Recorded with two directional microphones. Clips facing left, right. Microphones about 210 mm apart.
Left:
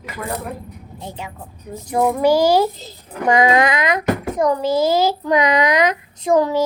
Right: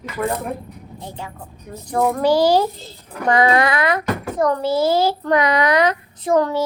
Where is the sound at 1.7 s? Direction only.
10° left (ahead or behind).